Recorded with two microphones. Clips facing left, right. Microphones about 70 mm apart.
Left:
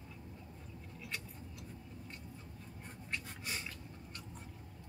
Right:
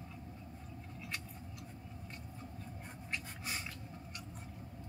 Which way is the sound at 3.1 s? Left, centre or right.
Centre.